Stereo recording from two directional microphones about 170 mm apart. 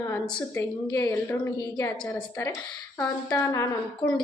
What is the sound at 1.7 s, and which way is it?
Speech, 25° left (ahead or behind).